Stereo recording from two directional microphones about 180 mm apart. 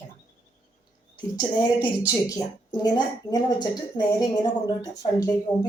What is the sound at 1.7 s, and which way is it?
Speech, 10° right (ahead or behind).